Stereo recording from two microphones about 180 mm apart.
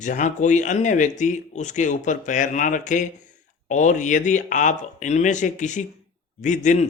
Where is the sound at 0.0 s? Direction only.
45° left (ahead or behind).